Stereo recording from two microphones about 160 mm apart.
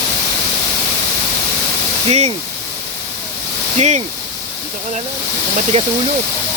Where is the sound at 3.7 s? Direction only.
45° right (ahead or behind).